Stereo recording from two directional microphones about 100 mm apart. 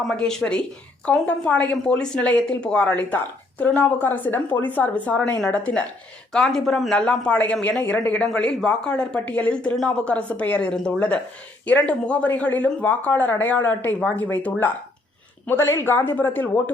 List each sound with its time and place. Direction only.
0.1 s speech: 5° left (ahead or behind)